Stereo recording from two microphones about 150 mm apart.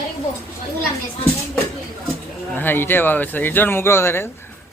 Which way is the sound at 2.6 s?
15° left (ahead or behind).